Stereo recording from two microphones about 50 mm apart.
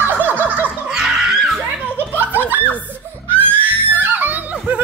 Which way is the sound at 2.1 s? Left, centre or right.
Right.